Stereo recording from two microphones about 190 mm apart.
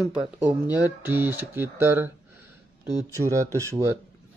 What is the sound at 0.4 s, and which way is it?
Speech, 10° right (ahead or behind).